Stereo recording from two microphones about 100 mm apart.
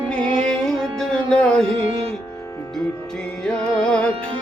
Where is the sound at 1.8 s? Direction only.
80° right.